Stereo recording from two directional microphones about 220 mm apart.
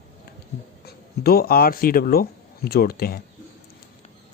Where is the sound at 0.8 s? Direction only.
45° left (ahead or behind).